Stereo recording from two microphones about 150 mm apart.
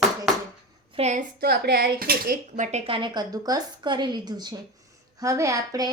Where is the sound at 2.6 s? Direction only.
50° right (ahead or behind).